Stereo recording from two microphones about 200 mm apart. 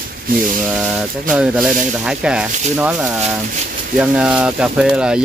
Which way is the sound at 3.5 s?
40° right (ahead or behind).